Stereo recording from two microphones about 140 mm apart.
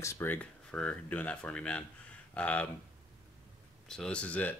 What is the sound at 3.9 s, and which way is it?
Speech, 5° left (ahead or behind).